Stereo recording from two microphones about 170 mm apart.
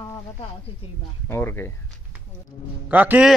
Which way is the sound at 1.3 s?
15° left (ahead or behind).